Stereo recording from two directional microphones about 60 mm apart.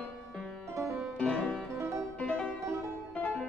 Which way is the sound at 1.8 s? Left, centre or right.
Right.